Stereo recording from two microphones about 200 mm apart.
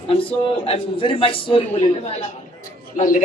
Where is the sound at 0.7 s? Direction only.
25° left (ahead or behind).